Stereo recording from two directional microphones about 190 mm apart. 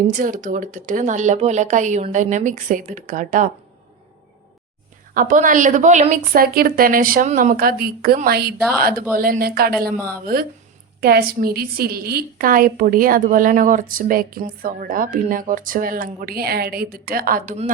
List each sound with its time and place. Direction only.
0.2 s a woman's voice: 45° right (ahead or behind)
5.1 s a woman's voice: 45° right (ahead or behind)